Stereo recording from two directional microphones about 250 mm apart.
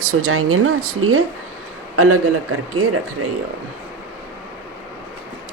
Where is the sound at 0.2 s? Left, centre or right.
Right.